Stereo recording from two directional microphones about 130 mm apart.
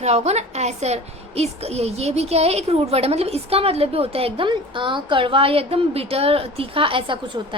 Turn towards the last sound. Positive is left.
turn(degrees=-40)  # may be behind; listen again after turning